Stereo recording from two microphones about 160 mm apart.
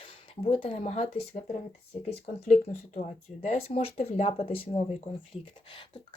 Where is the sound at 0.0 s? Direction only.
35° left (ahead or behind).